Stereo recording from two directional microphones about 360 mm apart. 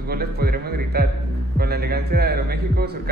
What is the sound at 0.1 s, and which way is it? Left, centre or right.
A man's voice, right.